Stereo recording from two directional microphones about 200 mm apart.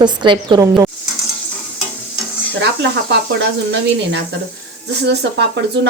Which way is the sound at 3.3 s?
65° right (ahead or behind).